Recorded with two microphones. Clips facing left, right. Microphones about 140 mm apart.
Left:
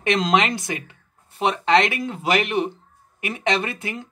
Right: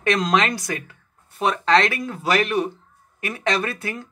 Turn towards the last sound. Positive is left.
turn(degrees=20)  # may be behind; listen again after turning